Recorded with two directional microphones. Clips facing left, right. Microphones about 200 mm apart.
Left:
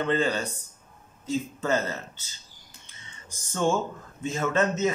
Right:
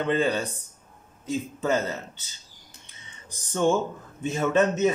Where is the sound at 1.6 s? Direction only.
15° right (ahead or behind).